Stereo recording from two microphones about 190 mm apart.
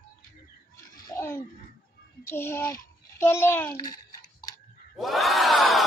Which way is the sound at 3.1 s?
10° left (ahead or behind).